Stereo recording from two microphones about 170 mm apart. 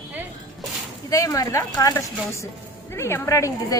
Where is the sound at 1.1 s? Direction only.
20° left (ahead or behind).